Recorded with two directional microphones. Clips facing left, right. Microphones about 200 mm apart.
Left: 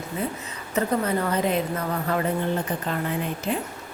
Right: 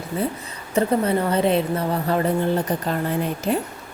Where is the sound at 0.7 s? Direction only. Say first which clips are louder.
Right 4 dB; 30° right (ahead or behind).